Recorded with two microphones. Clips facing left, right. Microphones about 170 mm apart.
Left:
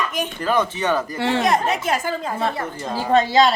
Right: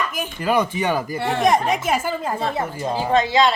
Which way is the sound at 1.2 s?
90° left.